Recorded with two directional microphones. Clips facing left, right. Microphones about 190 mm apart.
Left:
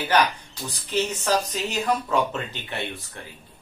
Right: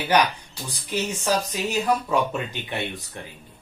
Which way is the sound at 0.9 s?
10° right (ahead or behind).